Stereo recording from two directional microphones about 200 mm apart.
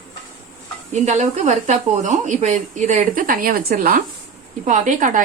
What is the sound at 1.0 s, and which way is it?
Speech, 35° right (ahead or behind).